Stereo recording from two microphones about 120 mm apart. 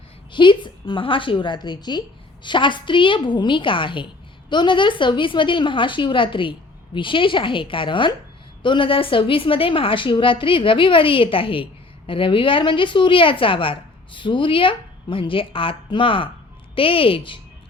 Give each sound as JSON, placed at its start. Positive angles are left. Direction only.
{"t": 0.3, "sound": "a woman's voice", "side_deg": 40}